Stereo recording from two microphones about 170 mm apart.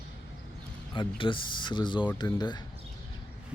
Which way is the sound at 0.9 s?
30° left (ahead or behind).